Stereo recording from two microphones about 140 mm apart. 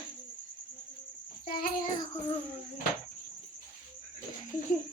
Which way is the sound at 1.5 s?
90° left.